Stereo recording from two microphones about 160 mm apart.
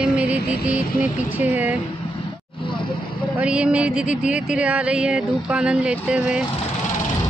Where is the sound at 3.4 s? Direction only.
5° right (ahead or behind).